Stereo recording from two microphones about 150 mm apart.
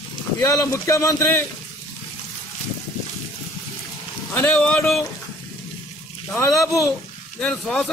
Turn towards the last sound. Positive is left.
turn(degrees=5)  # may be behind; listen again after turning